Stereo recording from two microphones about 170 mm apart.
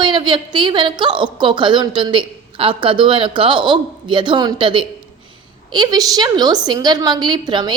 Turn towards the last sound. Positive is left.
turn(degrees=-25)  # may be behind; listen again after turning